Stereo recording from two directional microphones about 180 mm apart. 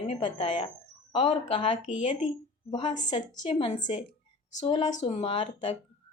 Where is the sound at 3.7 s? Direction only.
45° left (ahead or behind).